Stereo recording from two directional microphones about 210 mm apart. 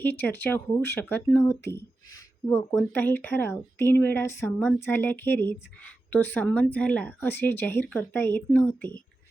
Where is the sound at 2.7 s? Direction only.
10° left (ahead or behind).